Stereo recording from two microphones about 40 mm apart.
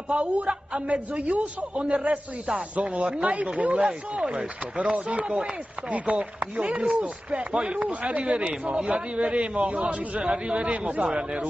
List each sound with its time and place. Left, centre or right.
0.1 s a man's voice: right
4.9 s a man's voice: right
8.7 s speech: right
9.2 s a man's voice: right